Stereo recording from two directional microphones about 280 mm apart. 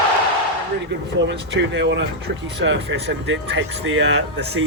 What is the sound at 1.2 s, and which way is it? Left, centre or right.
Speech, right.